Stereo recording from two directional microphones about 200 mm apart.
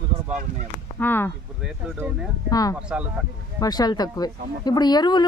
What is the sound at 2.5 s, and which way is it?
Speech, 20° left (ahead or behind).